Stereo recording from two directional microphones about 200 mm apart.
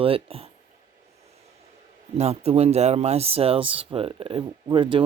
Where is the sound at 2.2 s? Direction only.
30° right (ahead or behind).